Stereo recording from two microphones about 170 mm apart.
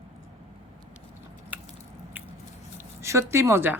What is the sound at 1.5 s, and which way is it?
Biting, 10° right (ahead or behind).